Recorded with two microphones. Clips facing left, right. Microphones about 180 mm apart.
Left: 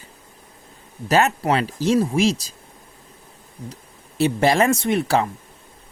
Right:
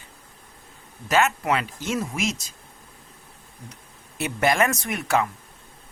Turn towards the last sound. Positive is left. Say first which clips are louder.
# left 5 dB
turn(degrees=30)  # may be behind; listen again after turning